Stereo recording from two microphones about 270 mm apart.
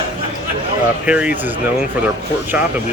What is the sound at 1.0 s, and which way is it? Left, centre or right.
Speech, centre.